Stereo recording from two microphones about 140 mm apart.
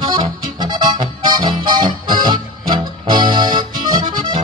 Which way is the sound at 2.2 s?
30° right (ahead or behind).